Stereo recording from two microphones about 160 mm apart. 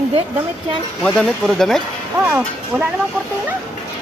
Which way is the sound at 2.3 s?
10° right (ahead or behind).